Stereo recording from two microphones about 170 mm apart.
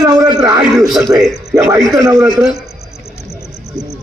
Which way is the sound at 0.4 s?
20° right (ahead or behind).